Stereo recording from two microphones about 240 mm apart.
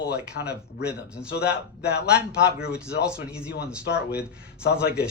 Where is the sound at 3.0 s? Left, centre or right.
Centre.